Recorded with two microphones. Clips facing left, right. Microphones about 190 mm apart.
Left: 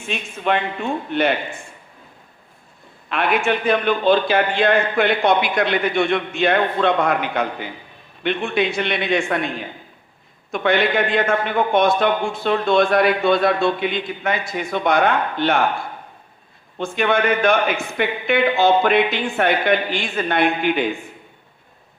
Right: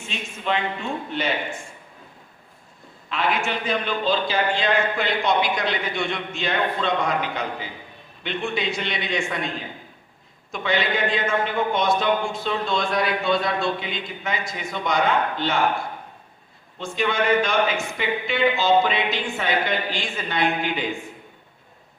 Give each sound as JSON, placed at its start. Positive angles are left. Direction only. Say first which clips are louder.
{"t": 0.1, "sound": "a man's voice", "louder": "left 5 dB", "side_deg": 55}
{"t": 3.1, "sound": "a man's voice", "louder": "left 5 dB", "side_deg": 60}
{"t": 10.5, "sound": "a man's voice", "louder": "left 6 dB", "side_deg": 60}
{"t": 16.7, "sound": "a man's voice", "louder": "left 5 dB", "side_deg": 60}